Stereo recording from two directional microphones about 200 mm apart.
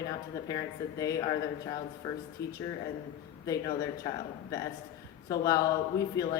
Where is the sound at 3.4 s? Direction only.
20° left (ahead or behind).